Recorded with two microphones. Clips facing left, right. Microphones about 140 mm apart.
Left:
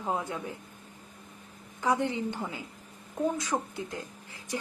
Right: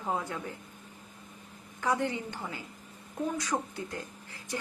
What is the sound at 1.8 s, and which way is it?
A woman's voice, 20° left (ahead or behind).